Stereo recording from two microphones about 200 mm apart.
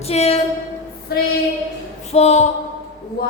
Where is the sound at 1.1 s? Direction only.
50° left (ahead or behind).